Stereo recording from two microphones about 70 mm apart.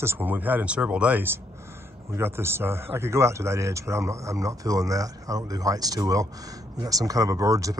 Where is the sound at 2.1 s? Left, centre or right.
Right.